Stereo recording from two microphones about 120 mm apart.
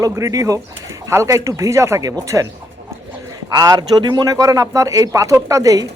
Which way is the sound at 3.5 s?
30° right (ahead or behind).